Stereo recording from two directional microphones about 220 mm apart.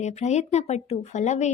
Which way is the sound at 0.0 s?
30° left (ahead or behind).